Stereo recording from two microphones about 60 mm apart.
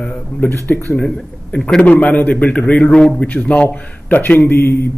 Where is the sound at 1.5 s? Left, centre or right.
Centre.